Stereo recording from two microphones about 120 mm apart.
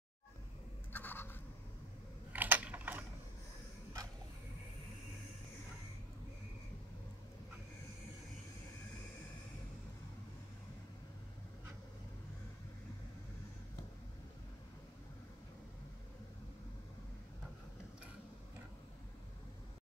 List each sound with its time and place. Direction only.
0.9 s scratch: 15° left (ahead or behind)
2.3 s typing: 15° right (ahead or behind)